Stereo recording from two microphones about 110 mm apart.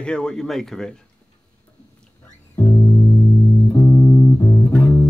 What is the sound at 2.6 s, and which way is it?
Music, 20° left (ahead or behind).